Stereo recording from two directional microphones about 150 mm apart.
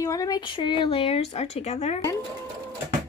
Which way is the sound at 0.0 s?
20° left (ahead or behind).